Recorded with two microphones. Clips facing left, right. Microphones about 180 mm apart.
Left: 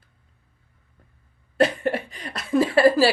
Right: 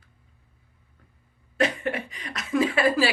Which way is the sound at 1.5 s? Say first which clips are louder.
Left 4 dB; 35° left (ahead or behind).